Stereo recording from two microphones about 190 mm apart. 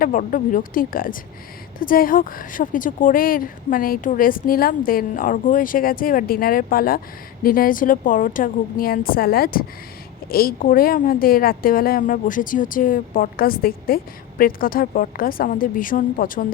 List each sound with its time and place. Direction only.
0.0 s a woman's voice: 45° left (ahead or behind)